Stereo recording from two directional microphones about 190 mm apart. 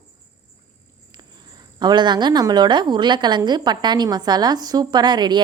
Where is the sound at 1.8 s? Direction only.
20° right (ahead or behind).